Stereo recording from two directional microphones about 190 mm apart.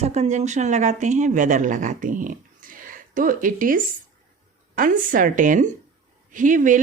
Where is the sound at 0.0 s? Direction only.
35° right (ahead or behind).